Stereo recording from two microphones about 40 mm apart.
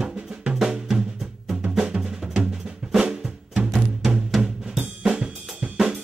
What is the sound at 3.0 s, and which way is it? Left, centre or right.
Drum, centre.